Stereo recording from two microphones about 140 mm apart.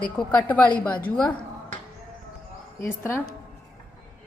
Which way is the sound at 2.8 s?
15° left (ahead or behind).